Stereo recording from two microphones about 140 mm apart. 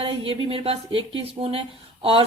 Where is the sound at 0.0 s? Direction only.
40° right (ahead or behind).